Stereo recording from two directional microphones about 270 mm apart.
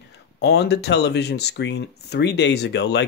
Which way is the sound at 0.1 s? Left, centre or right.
Left.